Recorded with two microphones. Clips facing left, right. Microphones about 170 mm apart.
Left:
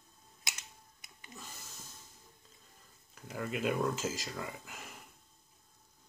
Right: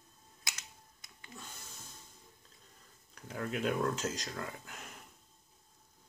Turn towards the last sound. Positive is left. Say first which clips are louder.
# even
turn(degrees=5)  # may be behind; listen again after turning